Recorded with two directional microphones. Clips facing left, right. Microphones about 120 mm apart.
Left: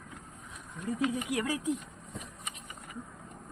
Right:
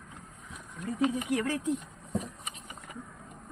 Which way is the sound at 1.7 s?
35° right (ahead or behind).